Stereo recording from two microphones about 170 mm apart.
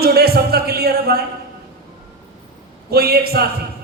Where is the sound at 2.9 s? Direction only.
65° right (ahead or behind).